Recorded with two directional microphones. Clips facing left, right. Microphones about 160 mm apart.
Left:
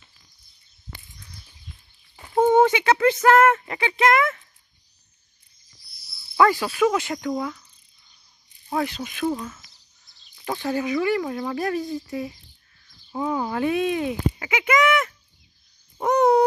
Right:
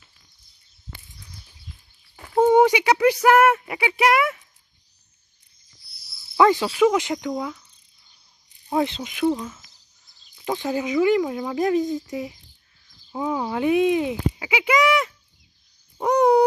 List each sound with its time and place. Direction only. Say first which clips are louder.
2.4 s speech: right 1 dB; 15° right (ahead or behind)
6.3 s speech: right 2 dB; 20° right (ahead or behind)
8.6 s speech: right 3 dB; 20° right (ahead or behind)
10.3 s speech: right 1 dB; 15° right (ahead or behind)
13.1 s speech: even; 10° right (ahead or behind)
16.0 s owl: right 1 dB; 15° right (ahead or behind)